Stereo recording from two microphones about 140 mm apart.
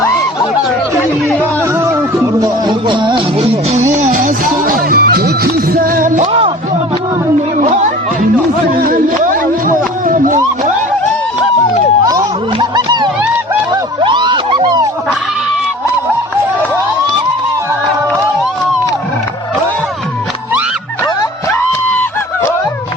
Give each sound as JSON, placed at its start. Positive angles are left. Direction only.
{"t": 1.8, "sound": "music", "side_deg": -20}
{"t": 3.9, "sound": "music", "side_deg": -65}
{"t": 7.6, "sound": "music", "side_deg": -60}
{"t": 8.8, "sound": "music", "side_deg": -75}
{"t": 12.5, "sound": "a sound", "side_deg": -30}